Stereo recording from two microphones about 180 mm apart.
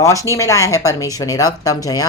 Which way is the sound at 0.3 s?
15° left (ahead or behind).